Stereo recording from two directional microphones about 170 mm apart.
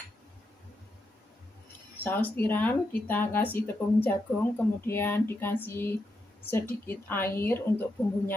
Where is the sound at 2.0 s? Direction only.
10° left (ahead or behind).